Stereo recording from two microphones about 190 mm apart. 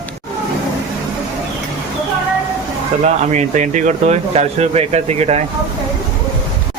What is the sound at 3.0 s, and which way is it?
Speech, 40° right (ahead or behind).